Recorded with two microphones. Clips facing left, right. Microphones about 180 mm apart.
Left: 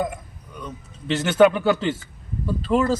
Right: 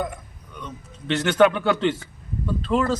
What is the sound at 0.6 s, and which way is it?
Speech, 5° left (ahead or behind).